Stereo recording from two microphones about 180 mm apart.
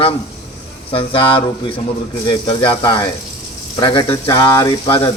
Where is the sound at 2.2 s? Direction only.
25° left (ahead or behind).